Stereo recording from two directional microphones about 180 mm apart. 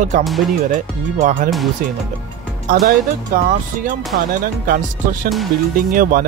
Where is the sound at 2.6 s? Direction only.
55° right (ahead or behind).